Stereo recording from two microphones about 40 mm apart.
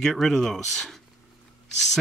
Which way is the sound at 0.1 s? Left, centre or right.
Centre.